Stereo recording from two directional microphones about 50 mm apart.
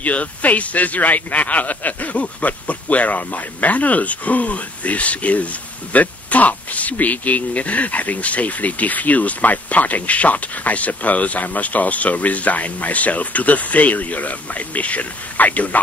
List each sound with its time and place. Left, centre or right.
0.0 s speech: left